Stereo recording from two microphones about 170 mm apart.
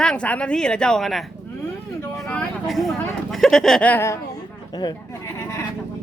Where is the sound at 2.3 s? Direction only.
5° left (ahead or behind).